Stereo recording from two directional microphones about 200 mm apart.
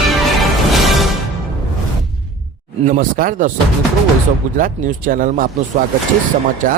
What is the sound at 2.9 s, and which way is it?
Speech, 45° right (ahead or behind).